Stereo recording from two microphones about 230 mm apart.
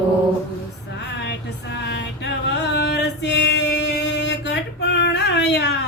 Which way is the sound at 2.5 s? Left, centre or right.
Left.